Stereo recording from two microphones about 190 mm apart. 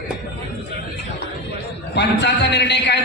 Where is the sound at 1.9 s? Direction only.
65° left (ahead or behind).